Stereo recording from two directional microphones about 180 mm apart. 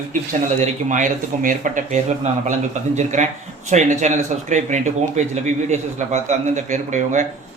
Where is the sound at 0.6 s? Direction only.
45° right (ahead or behind).